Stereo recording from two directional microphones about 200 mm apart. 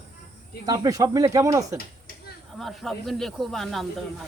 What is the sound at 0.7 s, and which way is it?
Speech, 15° right (ahead or behind).